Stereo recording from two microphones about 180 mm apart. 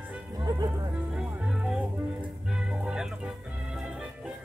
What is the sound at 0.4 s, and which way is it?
Music, 20° right (ahead or behind).